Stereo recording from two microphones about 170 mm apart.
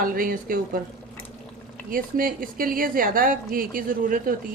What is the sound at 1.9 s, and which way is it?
A woman's voice, 55° right (ahead or behind).